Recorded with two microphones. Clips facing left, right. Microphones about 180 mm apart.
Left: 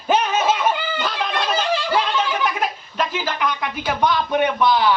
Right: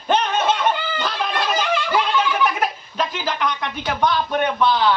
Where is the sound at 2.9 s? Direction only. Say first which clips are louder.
Even; 5° left (ahead or behind).